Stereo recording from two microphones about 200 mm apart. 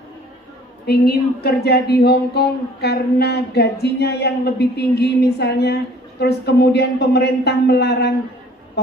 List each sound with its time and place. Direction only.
0.8 s speech: 50° left (ahead or behind)
8.8 s bee: 55° left (ahead or behind)